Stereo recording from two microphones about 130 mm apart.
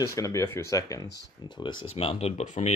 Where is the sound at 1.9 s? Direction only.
50° left (ahead or behind).